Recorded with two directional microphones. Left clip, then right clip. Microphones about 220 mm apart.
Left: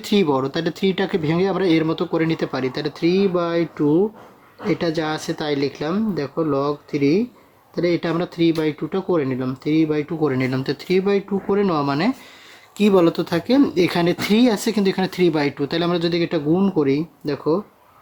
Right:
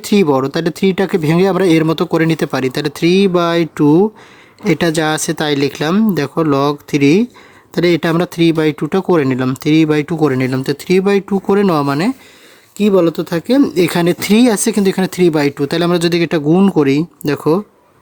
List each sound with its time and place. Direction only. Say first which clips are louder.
0.0 s speech: right 6 dB; 30° right (ahead or behind)